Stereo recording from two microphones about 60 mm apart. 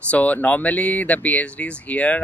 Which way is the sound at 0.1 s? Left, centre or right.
Left.